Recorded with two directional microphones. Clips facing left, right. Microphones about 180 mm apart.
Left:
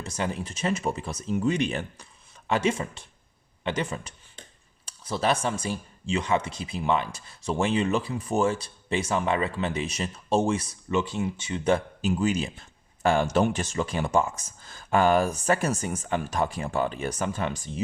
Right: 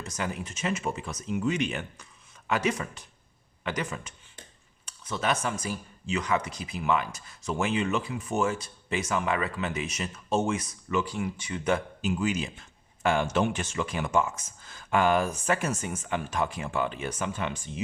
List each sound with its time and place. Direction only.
0.0 s speech: 30° left (ahead or behind)